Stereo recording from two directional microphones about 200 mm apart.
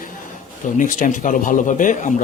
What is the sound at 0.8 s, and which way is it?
A man's voice, 40° left (ahead or behind).